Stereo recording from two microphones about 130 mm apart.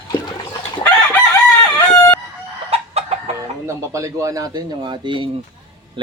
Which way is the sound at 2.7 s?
50° right (ahead or behind).